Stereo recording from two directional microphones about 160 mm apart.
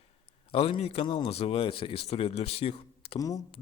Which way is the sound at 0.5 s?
35° left (ahead or behind).